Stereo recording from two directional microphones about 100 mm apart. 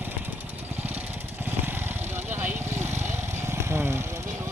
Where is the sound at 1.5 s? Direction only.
20° right (ahead or behind).